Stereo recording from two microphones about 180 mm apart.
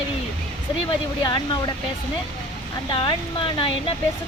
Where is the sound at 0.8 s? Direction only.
25° left (ahead or behind).